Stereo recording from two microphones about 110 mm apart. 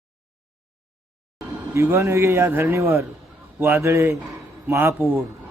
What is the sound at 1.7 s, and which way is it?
A man's voice, 25° right (ahead or behind).